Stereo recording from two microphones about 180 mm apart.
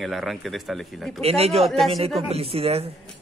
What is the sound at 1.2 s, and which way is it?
Speech, 35° right (ahead or behind).